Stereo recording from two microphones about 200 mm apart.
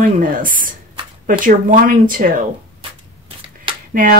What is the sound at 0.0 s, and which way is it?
Speech, 45° right (ahead or behind).